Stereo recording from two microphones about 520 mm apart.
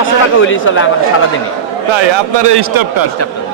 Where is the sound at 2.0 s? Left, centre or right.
Right.